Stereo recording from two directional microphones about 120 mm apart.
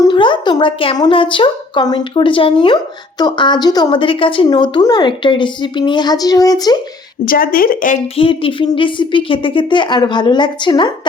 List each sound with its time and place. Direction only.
0.1 s a sound: 40° left (ahead or behind)
0.9 s a woman's voice: 45° left (ahead or behind)
3.9 s speech: 45° left (ahead or behind)
7.2 s speech: 90° left
8.1 s speech: 50° left (ahead or behind)